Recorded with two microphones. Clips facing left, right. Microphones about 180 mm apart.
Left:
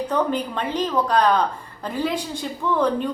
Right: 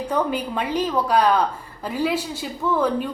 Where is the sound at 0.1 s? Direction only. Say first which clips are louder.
Right 1 dB; 10° right (ahead or behind).